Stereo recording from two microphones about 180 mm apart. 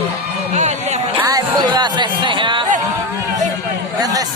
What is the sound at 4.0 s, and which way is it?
Chatter, 20° right (ahead or behind).